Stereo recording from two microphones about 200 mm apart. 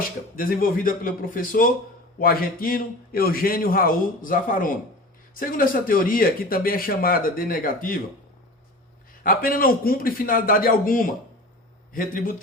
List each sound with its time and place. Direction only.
0.3 s speech: 45° left (ahead or behind)
9.2 s speech: 45° left (ahead or behind)